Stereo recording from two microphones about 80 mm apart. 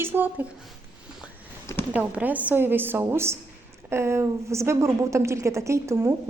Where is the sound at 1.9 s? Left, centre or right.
Centre.